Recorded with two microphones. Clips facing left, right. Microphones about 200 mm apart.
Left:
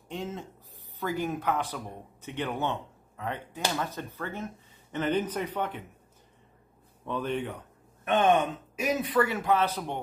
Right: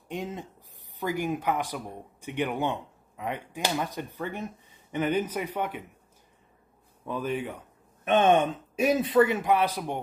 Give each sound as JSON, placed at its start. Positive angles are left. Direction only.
{"t": 0.1, "sound": "speech", "side_deg": -15}
{"t": 7.1, "sound": "speech", "side_deg": -5}
{"t": 8.0, "sound": "speech", "side_deg": -20}